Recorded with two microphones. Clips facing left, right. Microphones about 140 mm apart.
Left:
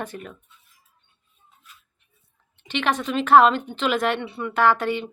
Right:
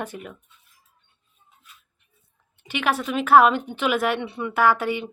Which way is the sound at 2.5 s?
10° right (ahead or behind).